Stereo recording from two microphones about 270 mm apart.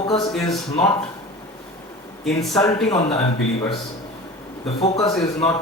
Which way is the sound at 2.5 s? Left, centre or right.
Centre.